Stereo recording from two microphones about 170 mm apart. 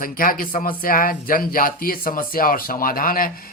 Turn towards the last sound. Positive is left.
turn(degrees=55)  # may be behind; listen again after turning